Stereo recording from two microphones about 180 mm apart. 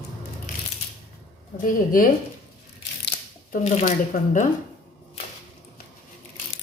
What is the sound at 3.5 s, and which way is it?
Speech, 40° left (ahead or behind).